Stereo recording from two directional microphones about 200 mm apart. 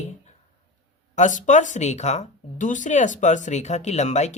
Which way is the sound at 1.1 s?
40° left (ahead or behind).